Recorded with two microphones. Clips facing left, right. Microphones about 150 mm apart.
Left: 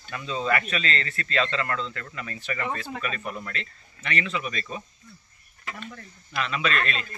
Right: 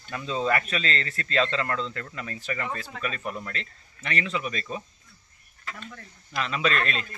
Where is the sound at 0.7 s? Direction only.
35° right (ahead or behind).